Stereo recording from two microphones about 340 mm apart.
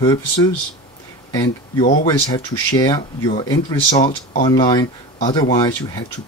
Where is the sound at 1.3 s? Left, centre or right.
Centre.